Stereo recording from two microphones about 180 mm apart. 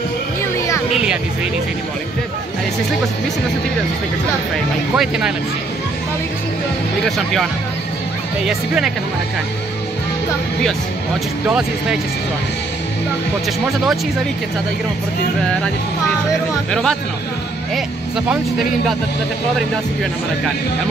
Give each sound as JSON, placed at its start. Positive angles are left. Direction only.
{"t": 4.9, "sound": "speech", "side_deg": -5}
{"t": 7.1, "sound": "speech", "side_deg": 0}
{"t": 8.5, "sound": "speech", "side_deg": -5}